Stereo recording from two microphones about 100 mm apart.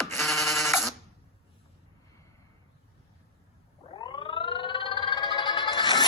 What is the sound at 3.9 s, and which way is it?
Music, 50° left (ahead or behind).